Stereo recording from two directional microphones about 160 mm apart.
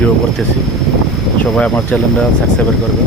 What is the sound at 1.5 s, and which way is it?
Speech, 10° left (ahead or behind).